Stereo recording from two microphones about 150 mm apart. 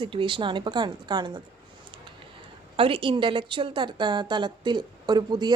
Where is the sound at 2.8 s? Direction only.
35° right (ahead or behind).